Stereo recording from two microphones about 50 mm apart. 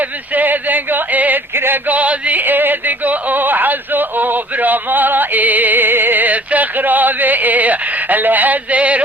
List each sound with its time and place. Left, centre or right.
0.3 s a sound: right
1.5 s male singing: right
1.9 s music: right